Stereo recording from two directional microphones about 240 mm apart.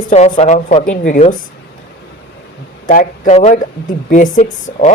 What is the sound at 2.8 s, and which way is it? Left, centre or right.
Speech, left.